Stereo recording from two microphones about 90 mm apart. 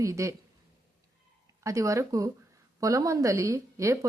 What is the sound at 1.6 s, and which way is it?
Speech, 35° right (ahead or behind).